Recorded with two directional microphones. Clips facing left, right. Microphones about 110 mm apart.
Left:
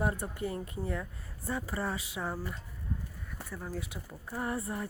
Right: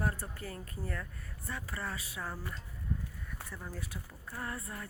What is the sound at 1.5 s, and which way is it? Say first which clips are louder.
Speech: left 6 dB; 30° left (ahead or behind).